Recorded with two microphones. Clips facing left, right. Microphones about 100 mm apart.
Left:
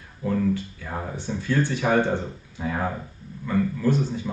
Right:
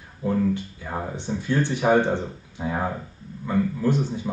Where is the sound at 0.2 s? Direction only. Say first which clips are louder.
Right 1 dB; 20° right (ahead or behind).